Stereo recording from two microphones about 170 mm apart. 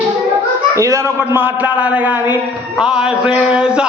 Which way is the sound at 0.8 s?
20° right (ahead or behind).